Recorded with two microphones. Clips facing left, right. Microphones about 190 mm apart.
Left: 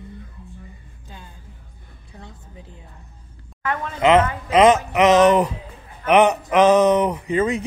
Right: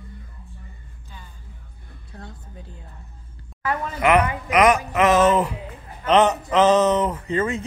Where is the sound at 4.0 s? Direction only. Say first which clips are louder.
Left 3 dB; 20° left (ahead or behind).